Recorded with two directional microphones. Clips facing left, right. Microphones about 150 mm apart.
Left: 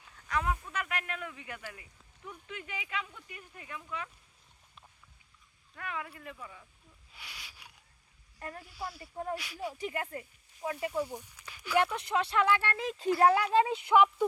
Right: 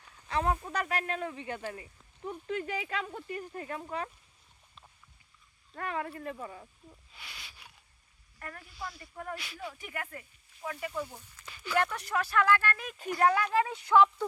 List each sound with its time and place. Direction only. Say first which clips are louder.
0.3 s speech: right 3 dB; 30° right (ahead or behind)
5.7 s speech: right 5 dB; 40° right (ahead or behind)
7.1 s a sound: left 3 dB; 10° left (ahead or behind)
8.4 s speech: left 2 dB; 25° left (ahead or behind)
8.7 s speech: even; 10° left (ahead or behind)
9.0 s speech: left 4 dB; 25° left (ahead or behind)
9.3 s speech: left 3 dB; 10° left (ahead or behind)
9.8 s speech: left 5 dB; 30° left (ahead or behind)